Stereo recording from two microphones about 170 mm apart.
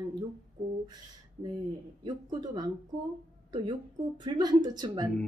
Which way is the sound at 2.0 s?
25° right (ahead or behind).